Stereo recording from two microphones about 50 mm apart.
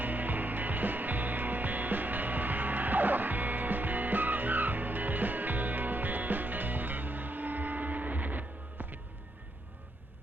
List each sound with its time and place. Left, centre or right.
0.0 s music: right